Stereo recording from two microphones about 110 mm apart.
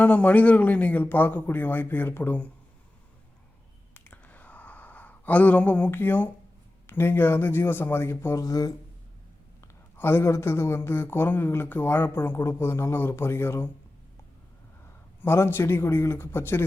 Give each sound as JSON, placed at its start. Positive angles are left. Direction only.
{"t": 0.0, "sound": "speech", "side_deg": 15}
{"t": 3.9, "sound": "a sound", "side_deg": 15}
{"t": 6.8, "sound": "speech", "side_deg": 20}
{"t": 10.0, "sound": "speech", "side_deg": 20}
{"t": 15.2, "sound": "speech", "side_deg": 20}